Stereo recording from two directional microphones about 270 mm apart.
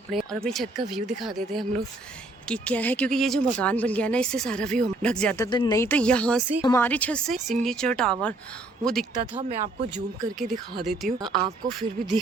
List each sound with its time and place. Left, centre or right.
0.1 s speech: centre
5.5 s speech: centre
9.4 s speech: right
10.5 s speech: centre